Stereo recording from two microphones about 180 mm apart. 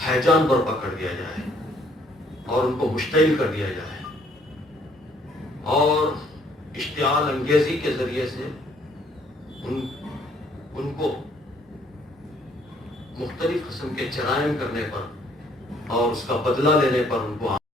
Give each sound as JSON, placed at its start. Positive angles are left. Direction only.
{"t": 0.0, "sound": "a man's voice", "side_deg": 0}
{"t": 2.6, "sound": "a man's voice", "side_deg": 0}
{"t": 5.6, "sound": "a man's voice", "side_deg": 0}
{"t": 9.6, "sound": "a man's voice", "side_deg": 0}
{"t": 13.1, "sound": "a man's voice", "side_deg": 0}